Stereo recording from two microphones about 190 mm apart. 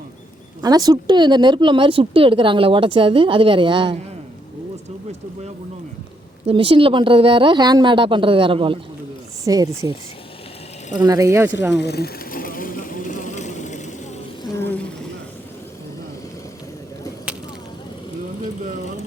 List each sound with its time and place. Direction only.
0.6 s speech: 20° right (ahead or behind)
6.4 s speech: 30° right (ahead or behind)
11.0 s speech: 15° right (ahead or behind)
11.7 s vehicle: 60° left (ahead or behind); by 13.9 s 40° left (ahead or behind)
14.4 s a sound: 10° left (ahead or behind)